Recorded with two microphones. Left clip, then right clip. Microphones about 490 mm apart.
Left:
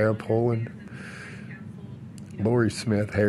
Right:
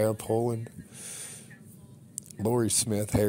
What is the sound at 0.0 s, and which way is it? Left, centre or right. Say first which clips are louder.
Speech: left 3 dB; right.